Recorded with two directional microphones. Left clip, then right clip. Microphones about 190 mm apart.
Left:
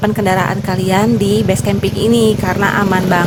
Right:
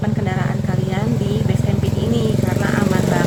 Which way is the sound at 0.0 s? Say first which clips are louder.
Left 10 dB; 55° left (ahead or behind).